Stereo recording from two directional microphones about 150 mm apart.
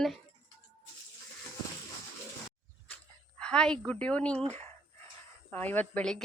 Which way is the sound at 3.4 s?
5° left (ahead or behind).